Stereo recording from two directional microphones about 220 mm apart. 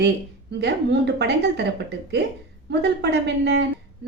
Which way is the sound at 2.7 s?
50° right (ahead or behind).